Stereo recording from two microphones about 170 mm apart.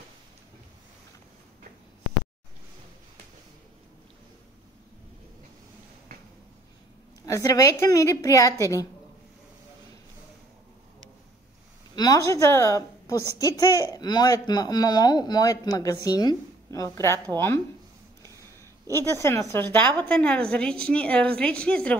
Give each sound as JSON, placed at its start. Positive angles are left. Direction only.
{"t": 7.2, "sound": "speech", "side_deg": 20}
{"t": 11.9, "sound": "speech", "side_deg": 20}
{"t": 18.4, "sound": "a sound", "side_deg": 15}
{"t": 19.2, "sound": "a woman's voice", "side_deg": 15}